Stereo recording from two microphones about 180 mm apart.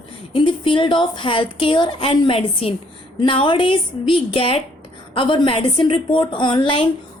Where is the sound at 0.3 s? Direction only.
30° left (ahead or behind).